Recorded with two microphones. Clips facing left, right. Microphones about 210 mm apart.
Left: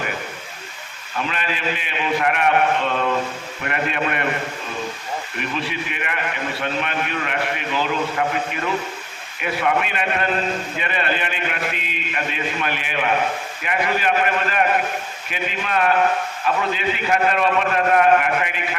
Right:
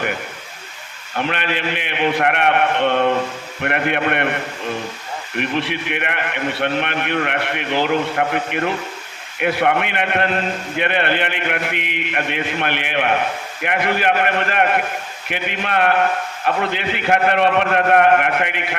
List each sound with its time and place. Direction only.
1.1 s a man's voice: 65° right (ahead or behind)
5.4 s a man's voice: 65° right (ahead or behind)
9.4 s a man's voice: 65° right (ahead or behind)